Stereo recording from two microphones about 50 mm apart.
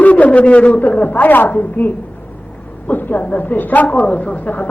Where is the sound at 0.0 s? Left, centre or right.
Left.